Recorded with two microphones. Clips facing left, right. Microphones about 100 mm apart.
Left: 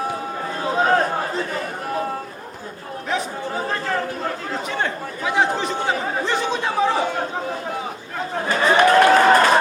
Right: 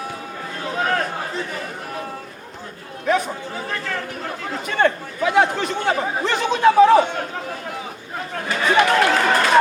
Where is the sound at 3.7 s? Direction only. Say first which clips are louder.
Left 3 dB; 35° left (ahead or behind).